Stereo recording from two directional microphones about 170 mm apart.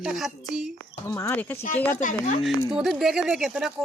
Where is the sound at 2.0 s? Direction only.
50° left (ahead or behind).